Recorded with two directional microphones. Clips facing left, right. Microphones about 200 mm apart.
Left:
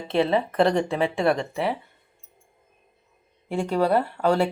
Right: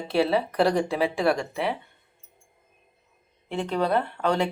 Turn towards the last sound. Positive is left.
turn(degrees=5)  # may be behind; listen again after turning